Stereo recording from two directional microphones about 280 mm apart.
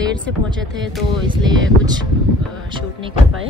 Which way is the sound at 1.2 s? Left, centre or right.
Centre.